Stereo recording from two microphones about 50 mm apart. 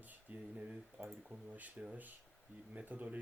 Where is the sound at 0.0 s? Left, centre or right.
Right.